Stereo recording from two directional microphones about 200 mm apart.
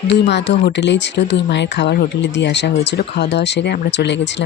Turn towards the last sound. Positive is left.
turn(degrees=60)  # may be behind; listen again after turning